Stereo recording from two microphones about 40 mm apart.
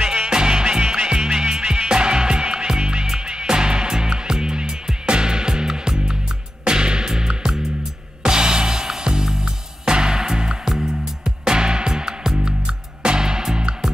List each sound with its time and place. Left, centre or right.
0.0 s music: centre